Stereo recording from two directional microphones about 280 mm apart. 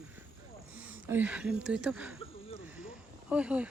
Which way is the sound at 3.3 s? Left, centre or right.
Centre.